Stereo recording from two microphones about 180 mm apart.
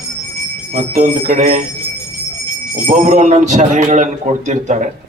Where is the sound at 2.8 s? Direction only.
40° right (ahead or behind).